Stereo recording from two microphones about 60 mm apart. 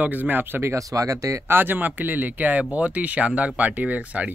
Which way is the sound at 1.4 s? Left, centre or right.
Right.